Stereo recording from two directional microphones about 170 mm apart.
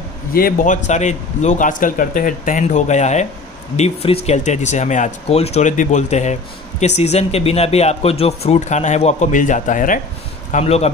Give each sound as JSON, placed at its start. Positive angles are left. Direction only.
{"t": 0.3, "sound": "speech", "side_deg": 60}
{"t": 10.5, "sound": "speech", "side_deg": 40}